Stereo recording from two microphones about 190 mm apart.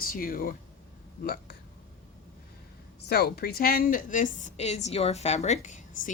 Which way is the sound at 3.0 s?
55° left (ahead or behind).